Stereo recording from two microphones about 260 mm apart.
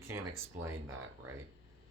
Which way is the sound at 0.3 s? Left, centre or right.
Centre.